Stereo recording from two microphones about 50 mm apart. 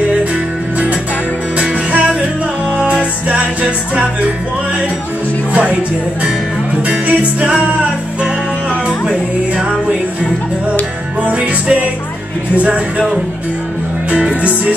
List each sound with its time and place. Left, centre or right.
1.9 s music: right
5.5 s music: right
6.9 s music: right
8.8 s speech: right
11.2 s music: right